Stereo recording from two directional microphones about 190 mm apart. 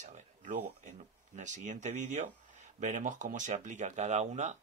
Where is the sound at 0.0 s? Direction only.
40° right (ahead or behind).